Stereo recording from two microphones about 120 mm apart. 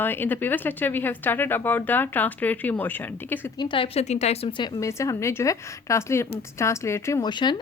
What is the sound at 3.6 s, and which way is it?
A woman's voice, 45° left (ahead or behind).